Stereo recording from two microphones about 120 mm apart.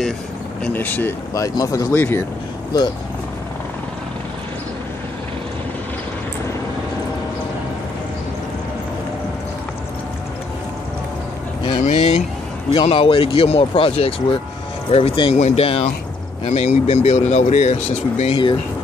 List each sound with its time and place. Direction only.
0.7 s speech: 15° left (ahead or behind)
1.3 s speech: 30° left (ahead or behind)
2.0 s speech: 15° left (ahead or behind)
2.7 s speech: 35° left (ahead or behind)
11.8 s vehicle: 60° left (ahead or behind)
12.7 s speech: 50° left (ahead or behind)
15.3 s speech: 65° left (ahead or behind)
16.4 s speech: 65° left (ahead or behind)
18.3 s speech: 40° left (ahead or behind)